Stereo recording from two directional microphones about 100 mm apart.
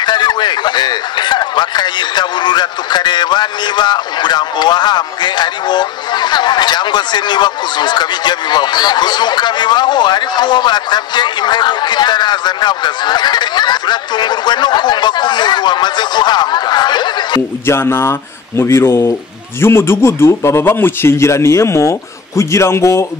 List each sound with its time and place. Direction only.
0.0 s a man's voice: 50° left (ahead or behind)
17.6 s speech: 25° left (ahead or behind)